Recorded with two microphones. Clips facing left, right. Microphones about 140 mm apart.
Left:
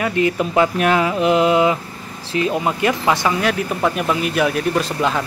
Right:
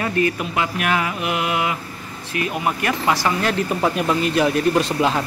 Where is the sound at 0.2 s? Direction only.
20° left (ahead or behind).